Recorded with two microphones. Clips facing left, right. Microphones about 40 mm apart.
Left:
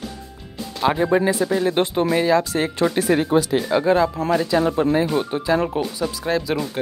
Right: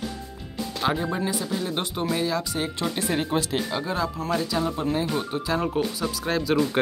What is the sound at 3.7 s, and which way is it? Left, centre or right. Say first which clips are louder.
Speech: left 9 dB; left.